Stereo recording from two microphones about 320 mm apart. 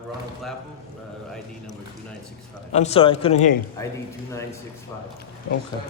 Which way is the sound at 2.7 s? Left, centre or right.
Centre.